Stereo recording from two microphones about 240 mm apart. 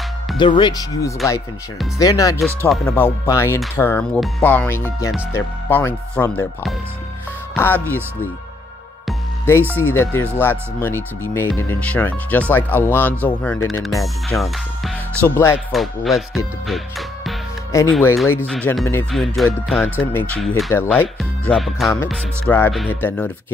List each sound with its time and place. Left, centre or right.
0.4 s speech: centre
9.8 s speech: centre
17.7 s speech: centre